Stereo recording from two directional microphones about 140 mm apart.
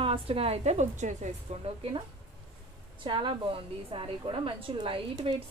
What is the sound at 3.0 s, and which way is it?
A woman's voice, 35° right (ahead or behind).